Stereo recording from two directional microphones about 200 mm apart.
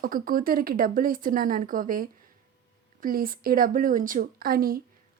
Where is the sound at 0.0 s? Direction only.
45° right (ahead or behind).